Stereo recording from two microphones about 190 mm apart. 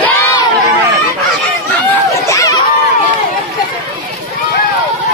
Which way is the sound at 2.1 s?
15° left (ahead or behind).